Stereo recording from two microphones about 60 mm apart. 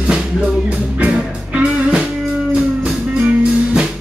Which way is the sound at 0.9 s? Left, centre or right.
Centre.